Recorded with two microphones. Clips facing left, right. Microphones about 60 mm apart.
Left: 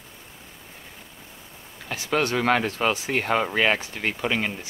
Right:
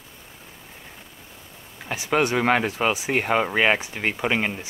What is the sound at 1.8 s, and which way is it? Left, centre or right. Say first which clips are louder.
Speech: right 2 dB; centre.